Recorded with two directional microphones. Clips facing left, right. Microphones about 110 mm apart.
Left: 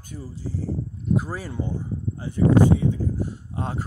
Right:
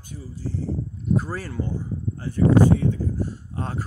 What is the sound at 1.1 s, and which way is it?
Speech, 10° left (ahead or behind).